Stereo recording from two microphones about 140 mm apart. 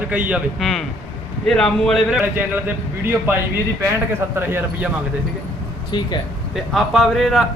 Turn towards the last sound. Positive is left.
turn(degrees=0)  # may be behind; listen again after turning